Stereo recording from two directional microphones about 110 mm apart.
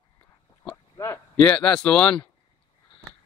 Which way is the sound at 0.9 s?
25° left (ahead or behind).